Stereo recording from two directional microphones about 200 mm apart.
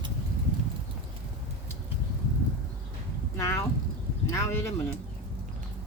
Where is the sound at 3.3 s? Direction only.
15° left (ahead or behind).